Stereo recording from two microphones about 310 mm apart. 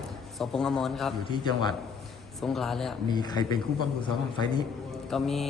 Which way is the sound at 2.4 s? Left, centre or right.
Centre.